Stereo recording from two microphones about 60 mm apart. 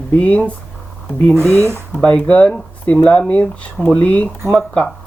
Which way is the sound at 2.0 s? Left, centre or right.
Centre.